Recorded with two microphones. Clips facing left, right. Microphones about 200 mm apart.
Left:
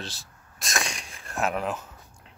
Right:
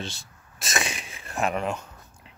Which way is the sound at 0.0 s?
Centre (ahead or behind).